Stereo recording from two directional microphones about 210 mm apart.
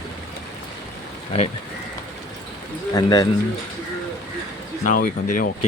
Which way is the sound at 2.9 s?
20° left (ahead or behind).